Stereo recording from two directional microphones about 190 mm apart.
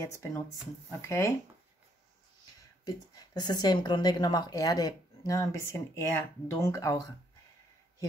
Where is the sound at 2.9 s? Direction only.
20° left (ahead or behind).